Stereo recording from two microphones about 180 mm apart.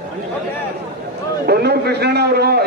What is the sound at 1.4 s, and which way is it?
A man's voice, 65° right (ahead or behind).